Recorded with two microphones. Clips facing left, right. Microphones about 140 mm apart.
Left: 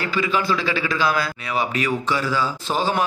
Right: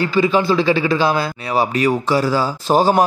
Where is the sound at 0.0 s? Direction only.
30° right (ahead or behind).